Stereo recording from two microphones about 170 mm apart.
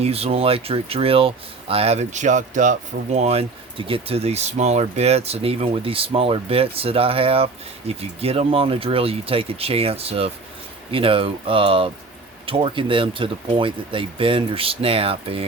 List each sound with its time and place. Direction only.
0.0 s speech: 35° right (ahead or behind)